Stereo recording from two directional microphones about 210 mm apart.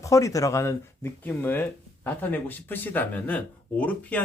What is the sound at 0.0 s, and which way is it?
Speech, 15° left (ahead or behind).